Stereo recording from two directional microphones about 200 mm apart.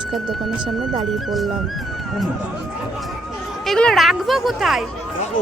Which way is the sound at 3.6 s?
5° left (ahead or behind).